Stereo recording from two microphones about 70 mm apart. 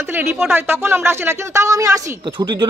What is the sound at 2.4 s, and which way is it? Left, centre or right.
Speech, right.